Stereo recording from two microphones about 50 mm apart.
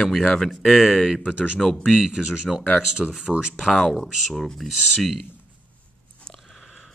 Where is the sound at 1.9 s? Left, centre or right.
Centre.